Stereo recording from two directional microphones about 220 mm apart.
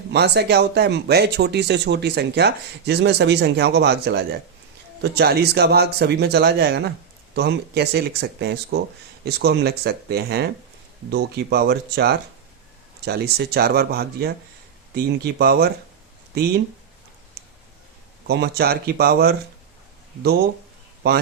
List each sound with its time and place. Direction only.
0.1 s speech: 50° right (ahead or behind)
17.4 s a sound: 45° right (ahead or behind)
18.3 s speech: 45° right (ahead or behind)